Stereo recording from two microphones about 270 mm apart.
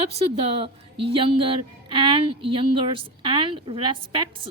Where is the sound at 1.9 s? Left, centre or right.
Centre.